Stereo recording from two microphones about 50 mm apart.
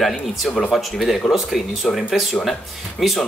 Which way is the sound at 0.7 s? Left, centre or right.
Centre.